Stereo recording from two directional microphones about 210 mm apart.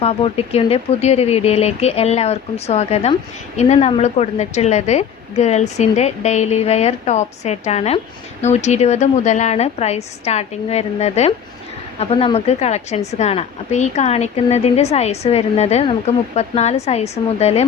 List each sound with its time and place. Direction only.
0.0 s a woman's voice: 30° left (ahead or behind)